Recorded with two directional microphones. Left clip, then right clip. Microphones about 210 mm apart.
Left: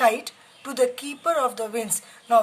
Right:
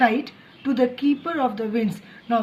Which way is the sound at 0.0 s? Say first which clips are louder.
Even; 55° left (ahead or behind).